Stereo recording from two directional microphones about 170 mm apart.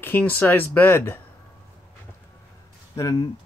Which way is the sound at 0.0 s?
10° left (ahead or behind).